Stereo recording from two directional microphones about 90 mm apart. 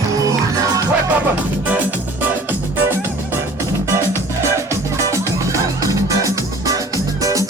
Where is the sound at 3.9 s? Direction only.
35° right (ahead or behind).